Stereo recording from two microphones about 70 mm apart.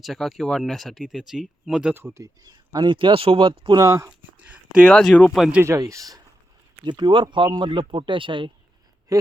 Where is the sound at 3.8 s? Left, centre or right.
Right.